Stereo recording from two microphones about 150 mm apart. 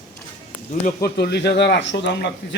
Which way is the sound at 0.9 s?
85° left.